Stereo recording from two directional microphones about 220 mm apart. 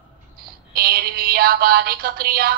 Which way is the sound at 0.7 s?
45° right (ahead or behind).